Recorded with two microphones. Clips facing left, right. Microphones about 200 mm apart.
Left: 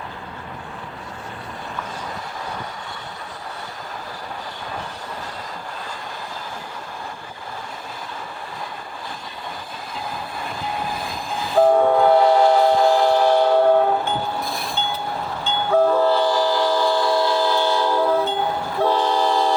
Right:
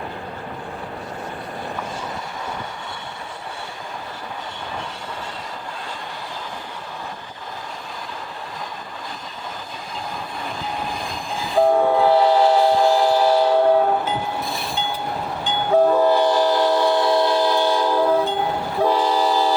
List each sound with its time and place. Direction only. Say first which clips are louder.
11.5 s train: left 1 dB; centre (ahead or behind)
15.4 s train: right 1 dB; 15° right (ahead or behind)